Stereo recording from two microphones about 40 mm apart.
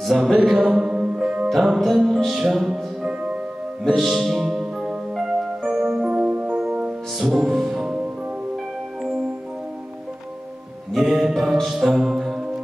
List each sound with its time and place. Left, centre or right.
0.1 s music: centre
0.6 s music: right
1.5 s music: centre
3.8 s speech: centre
4.1 s music: centre
6.0 s music: right
7.4 s music: centre
10.9 s music: centre